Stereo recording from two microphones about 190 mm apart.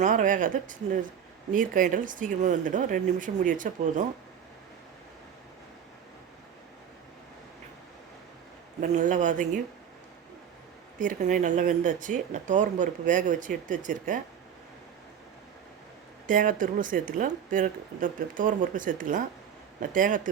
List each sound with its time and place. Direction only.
0.0 s speech: 45° right (ahead or behind)
8.8 s a man's voice: 40° right (ahead or behind)
11.0 s speech: 45° right (ahead or behind)
16.2 s speech: 45° right (ahead or behind)